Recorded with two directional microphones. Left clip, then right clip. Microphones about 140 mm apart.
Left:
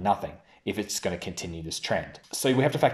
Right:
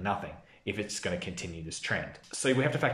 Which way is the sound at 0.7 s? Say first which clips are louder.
Left 4 dB; 30° left (ahead or behind).